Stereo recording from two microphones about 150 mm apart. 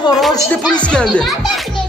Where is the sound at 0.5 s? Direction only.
10° left (ahead or behind).